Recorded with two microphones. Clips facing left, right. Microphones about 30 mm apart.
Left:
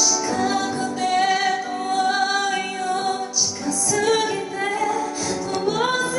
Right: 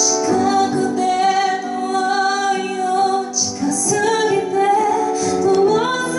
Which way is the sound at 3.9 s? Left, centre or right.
Centre.